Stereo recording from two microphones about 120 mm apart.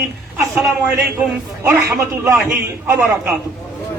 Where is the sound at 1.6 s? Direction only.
20° right (ahead or behind).